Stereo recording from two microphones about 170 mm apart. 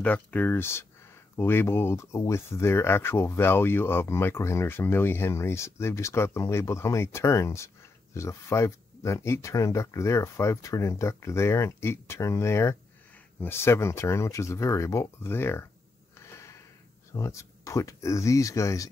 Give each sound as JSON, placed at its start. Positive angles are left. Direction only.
{"t": 0.0, "sound": "speech", "side_deg": 10}
{"t": 16.2, "sound": "a sound", "side_deg": 15}
{"t": 17.1, "sound": "speech", "side_deg": 15}